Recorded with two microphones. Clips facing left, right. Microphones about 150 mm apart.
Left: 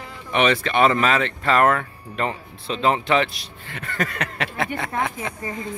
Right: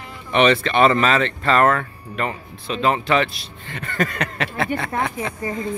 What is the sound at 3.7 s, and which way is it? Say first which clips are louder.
Speech: right 3 dB; 5° left (ahead or behind).